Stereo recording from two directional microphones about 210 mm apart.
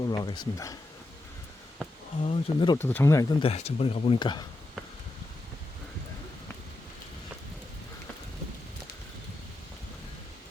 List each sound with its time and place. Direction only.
0.0 s speech: 20° left (ahead or behind)
2.2 s speech: 25° left (ahead or behind)
2.7 s speech: 10° left (ahead or behind)